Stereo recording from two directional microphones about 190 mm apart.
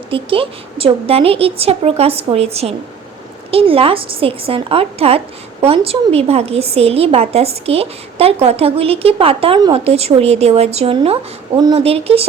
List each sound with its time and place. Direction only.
0.1 s a woman's voice: 30° right (ahead or behind)